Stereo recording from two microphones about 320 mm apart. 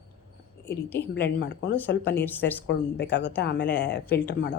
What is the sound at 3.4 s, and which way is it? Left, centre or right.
Speech, left.